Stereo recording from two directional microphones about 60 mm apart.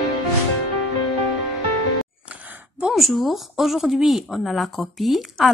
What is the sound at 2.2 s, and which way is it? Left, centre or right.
Gasp, right.